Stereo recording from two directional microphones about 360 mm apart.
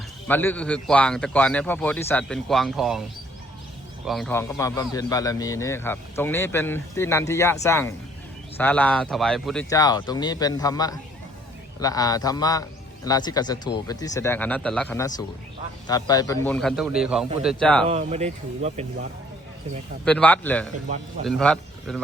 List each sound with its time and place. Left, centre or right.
0.3 s a man's voice: centre
4.0 s a man's voice: centre
17.8 s speech: centre
20.1 s a man's voice: centre